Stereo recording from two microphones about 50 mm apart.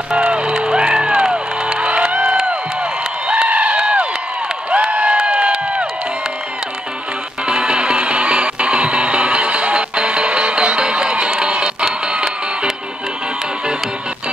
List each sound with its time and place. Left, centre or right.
0.1 s music: centre
2.1 s a sound: centre
4.6 s crowd: right
7.4 s music: centre